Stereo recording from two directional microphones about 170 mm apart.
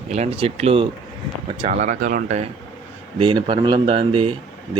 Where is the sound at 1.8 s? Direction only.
50° right (ahead or behind).